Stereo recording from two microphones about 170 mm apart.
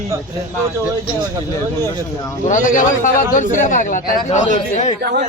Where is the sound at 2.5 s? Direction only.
50° left (ahead or behind).